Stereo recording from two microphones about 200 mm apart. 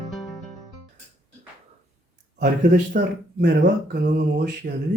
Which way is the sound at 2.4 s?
40° right (ahead or behind).